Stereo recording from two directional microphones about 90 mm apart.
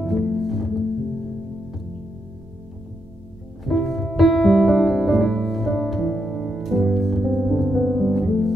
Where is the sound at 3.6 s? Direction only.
Centre (ahead or behind).